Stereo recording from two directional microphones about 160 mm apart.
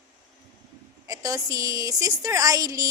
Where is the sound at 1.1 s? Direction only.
20° right (ahead or behind).